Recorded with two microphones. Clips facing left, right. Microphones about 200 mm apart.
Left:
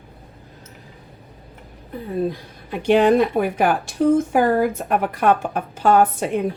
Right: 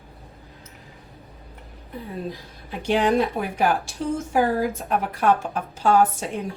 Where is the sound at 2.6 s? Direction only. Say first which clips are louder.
Left 6 dB; 55° left (ahead or behind).